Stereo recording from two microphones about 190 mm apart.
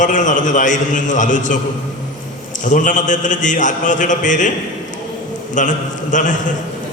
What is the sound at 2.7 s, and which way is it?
A man's voice, 40° left (ahead or behind).